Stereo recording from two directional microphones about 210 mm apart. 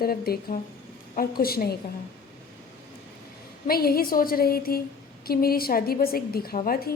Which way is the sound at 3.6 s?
45° left (ahead or behind).